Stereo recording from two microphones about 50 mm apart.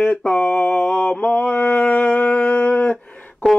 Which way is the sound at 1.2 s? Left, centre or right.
Left.